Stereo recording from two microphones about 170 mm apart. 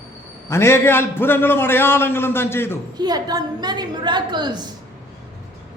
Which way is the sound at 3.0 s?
25° right (ahead or behind).